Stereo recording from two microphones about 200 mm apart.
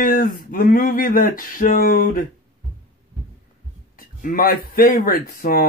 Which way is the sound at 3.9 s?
45° left (ahead or behind).